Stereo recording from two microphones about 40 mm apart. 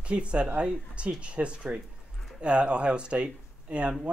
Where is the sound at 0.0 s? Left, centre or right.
Right.